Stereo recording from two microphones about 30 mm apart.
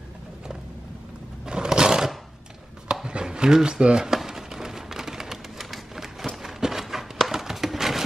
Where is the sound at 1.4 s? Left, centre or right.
Right.